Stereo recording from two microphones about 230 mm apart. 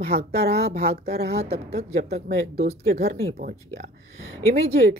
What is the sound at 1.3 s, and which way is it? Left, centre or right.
Speech, right.